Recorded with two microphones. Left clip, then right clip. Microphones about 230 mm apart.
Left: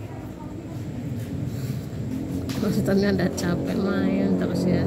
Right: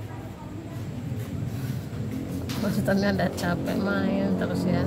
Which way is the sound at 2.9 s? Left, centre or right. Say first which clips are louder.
Left 1 dB; centre.